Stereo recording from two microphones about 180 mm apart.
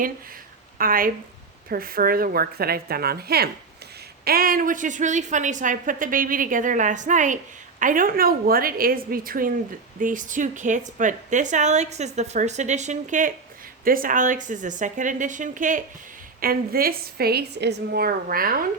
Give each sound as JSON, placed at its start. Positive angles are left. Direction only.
{"t": 0.8, "sound": "a woman's voice", "side_deg": -50}